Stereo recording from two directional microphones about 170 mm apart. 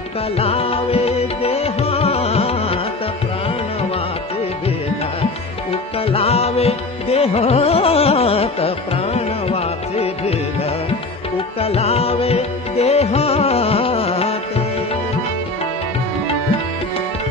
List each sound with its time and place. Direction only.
0.4 s music: 35° left (ahead or behind)
5.7 s music: 35° left (ahead or behind)